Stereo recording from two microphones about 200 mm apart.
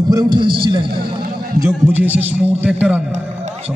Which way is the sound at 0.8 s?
50° right (ahead or behind).